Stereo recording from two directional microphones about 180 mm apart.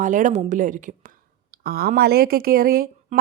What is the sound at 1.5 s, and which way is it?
A woman's voice, 55° right (ahead or behind).